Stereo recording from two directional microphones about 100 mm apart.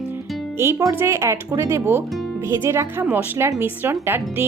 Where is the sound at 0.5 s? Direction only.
25° right (ahead or behind).